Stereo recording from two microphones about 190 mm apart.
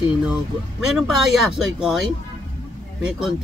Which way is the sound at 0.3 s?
5° right (ahead or behind).